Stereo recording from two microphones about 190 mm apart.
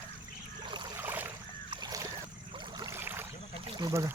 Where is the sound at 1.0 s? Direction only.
10° right (ahead or behind).